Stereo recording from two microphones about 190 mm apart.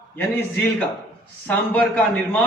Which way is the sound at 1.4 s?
5° left (ahead or behind).